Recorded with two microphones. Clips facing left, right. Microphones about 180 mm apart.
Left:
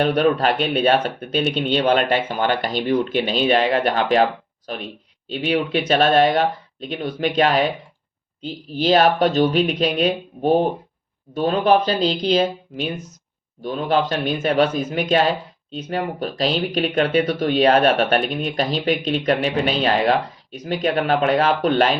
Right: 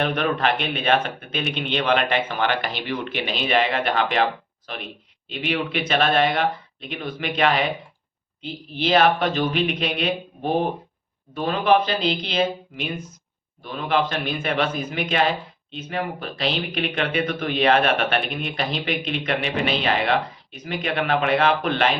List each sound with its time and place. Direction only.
0.0 s speech: 40° left (ahead or behind)